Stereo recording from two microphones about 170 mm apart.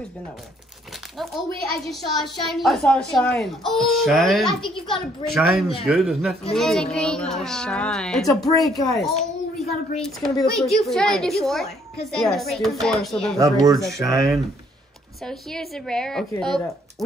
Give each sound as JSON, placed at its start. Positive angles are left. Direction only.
{"t": 1.1, "sound": "a woman's voice", "side_deg": 0}
{"t": 13.4, "sound": "speech", "side_deg": -20}
{"t": 15.2, "sound": "a woman's voice", "side_deg": 0}